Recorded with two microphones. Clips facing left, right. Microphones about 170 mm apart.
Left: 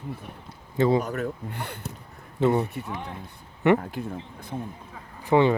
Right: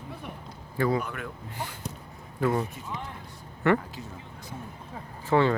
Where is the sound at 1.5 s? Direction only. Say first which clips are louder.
Left 1 dB; 60° left (ahead or behind).